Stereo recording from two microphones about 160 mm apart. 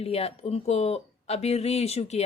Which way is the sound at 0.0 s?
40° left (ahead or behind).